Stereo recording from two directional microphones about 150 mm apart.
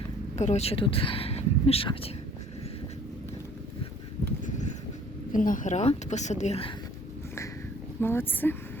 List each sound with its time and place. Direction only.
0.3 s speech: 50° left (ahead or behind)
4.4 s a sound: 55° left (ahead or behind)
5.3 s speech: 60° left (ahead or behind); by 6.7 s 40° left (ahead or behind)
8.0 s speech: 15° left (ahead or behind)